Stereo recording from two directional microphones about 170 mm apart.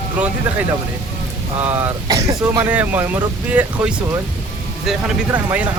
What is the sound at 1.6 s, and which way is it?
Speech, 15° right (ahead or behind).